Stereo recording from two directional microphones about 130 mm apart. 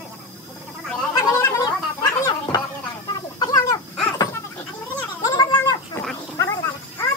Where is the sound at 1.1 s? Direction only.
25° left (ahead or behind).